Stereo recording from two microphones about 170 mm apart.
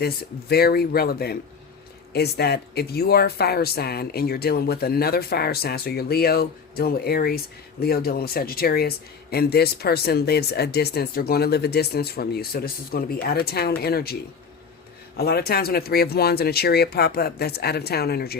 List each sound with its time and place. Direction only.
0.0 s speech: 65° left (ahead or behind)
15.2 s speech: 65° left (ahead or behind)